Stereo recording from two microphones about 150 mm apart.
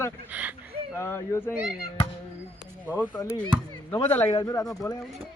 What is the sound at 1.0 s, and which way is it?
Speech, 15° left (ahead or behind).